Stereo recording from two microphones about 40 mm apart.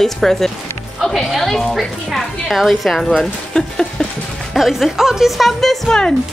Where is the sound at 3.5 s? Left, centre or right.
Centre.